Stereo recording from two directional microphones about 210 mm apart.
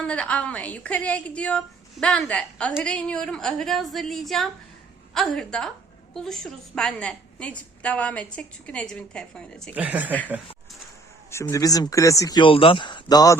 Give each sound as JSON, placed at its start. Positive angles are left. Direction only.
{"t": 0.0, "sound": "a woman's voice", "side_deg": 5}
{"t": 9.7, "sound": "speech", "side_deg": -5}
{"t": 11.3, "sound": "speech", "side_deg": 15}